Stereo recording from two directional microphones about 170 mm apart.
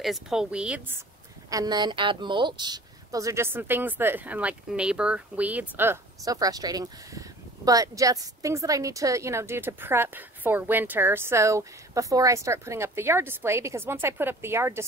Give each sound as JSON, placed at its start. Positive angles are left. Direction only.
{"t": 0.0, "sound": "a woman's voice", "side_deg": 0}
{"t": 1.5, "sound": "a woman's voice", "side_deg": -25}